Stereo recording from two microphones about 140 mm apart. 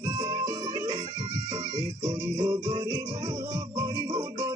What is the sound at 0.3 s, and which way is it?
Music, 25° right (ahead or behind).